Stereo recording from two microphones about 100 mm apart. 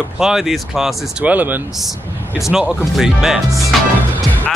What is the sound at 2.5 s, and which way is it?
Speech, 5° right (ahead or behind).